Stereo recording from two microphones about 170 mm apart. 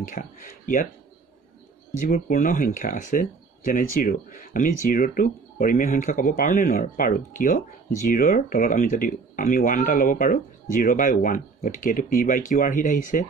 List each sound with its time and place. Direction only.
0.1 s speech: 50° left (ahead or behind)
2.0 s speech: 55° left (ahead or behind)